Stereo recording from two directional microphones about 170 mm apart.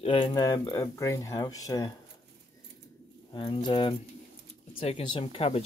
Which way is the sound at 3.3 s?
30° left (ahead or behind).